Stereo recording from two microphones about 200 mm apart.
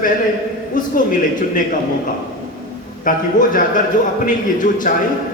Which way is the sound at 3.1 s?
40° left (ahead or behind).